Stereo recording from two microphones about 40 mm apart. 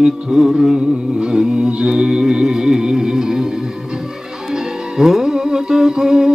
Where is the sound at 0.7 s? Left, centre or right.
Centre.